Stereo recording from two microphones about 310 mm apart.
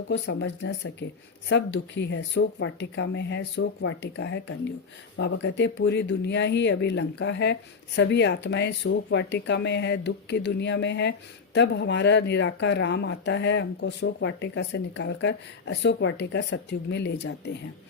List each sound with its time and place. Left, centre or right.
0.1 s speech: left